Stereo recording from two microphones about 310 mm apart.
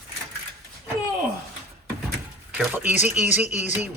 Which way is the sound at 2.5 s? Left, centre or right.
Centre.